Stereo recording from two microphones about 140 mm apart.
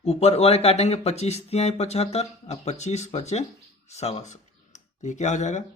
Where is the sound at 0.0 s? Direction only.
50° left (ahead or behind).